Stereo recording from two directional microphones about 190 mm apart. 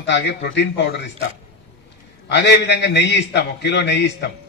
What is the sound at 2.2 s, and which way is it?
A man's voice, 65° left (ahead or behind).